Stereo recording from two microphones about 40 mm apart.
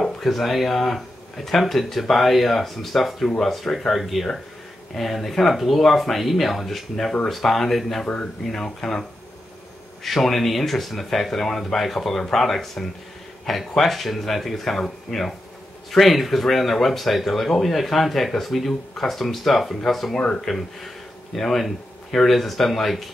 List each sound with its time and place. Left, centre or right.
0.0 s speech: centre
10.0 s speech: centre